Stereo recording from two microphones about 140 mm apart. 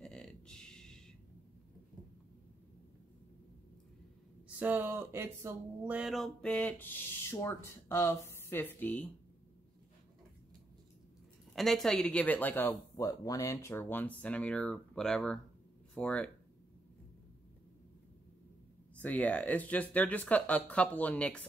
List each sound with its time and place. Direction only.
0.0 s a sound: 5° left (ahead or behind)
4.6 s speech: 15° right (ahead or behind); by 9.1 s 10° left (ahead or behind)
11.5 s speech: centre (ahead or behind)
18.9 s speech: 10° left (ahead or behind)